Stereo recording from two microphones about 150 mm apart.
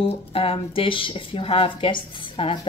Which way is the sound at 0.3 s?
40° left (ahead or behind).